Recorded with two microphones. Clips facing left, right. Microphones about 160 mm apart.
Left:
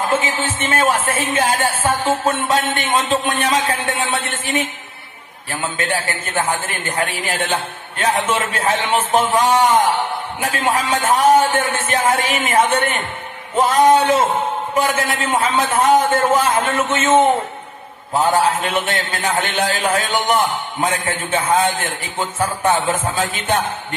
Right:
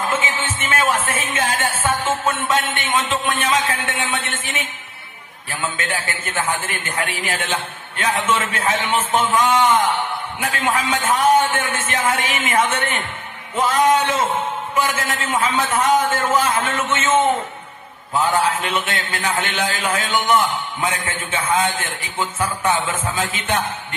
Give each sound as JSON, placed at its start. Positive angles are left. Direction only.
{"t": 0.3, "sound": "speech", "side_deg": 35}
{"t": 5.5, "sound": "speech", "side_deg": 35}
{"t": 21.3, "sound": "speech", "side_deg": 35}